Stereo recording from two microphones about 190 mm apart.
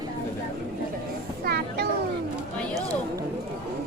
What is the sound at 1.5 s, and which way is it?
Music, 60° right (ahead or behind).